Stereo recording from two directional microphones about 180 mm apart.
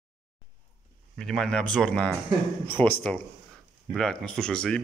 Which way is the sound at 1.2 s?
5° left (ahead or behind).